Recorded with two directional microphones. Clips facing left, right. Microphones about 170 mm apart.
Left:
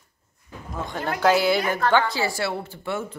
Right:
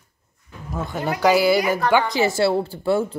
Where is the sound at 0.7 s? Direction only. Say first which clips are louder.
Right 3 dB; 5° right (ahead or behind).